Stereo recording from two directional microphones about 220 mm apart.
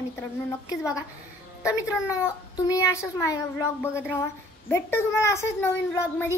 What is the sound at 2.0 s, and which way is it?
A child's voice, 15° left (ahead or behind).